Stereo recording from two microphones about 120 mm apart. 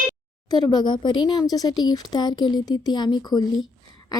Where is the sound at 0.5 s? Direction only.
35° left (ahead or behind).